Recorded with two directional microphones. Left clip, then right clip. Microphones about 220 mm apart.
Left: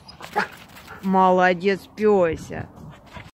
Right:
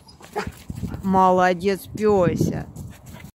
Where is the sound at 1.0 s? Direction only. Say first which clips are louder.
Even; 5° right (ahead or behind).